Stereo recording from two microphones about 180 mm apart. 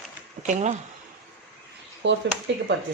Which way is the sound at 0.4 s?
40° right (ahead or behind).